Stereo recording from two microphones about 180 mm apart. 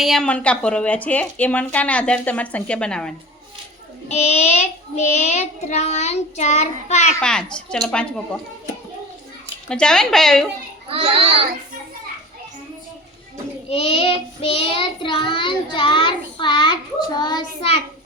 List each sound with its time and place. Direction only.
0.0 s speech: centre (ahead or behind)
4.1 s child singing: 35° left (ahead or behind)
7.2 s speech: 5° left (ahead or behind)
9.6 s speech: 5° left (ahead or behind)
10.8 s a child's voice: 30° right (ahead or behind)
13.7 s child singing: 30° left (ahead or behind)